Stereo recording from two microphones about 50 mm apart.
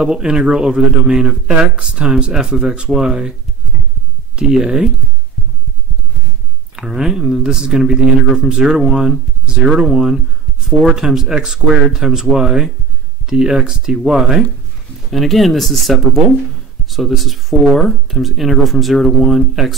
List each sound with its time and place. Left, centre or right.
0.0 s speech: centre
4.4 s speech: centre
6.7 s speech: centre